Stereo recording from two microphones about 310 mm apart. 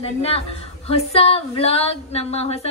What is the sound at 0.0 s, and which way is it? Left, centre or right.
Speech, centre.